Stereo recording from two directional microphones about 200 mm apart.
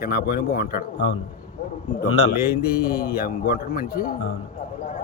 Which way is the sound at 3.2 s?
45° left (ahead or behind).